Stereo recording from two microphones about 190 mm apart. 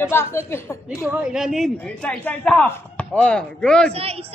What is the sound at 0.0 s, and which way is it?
Speech, 10° left (ahead or behind).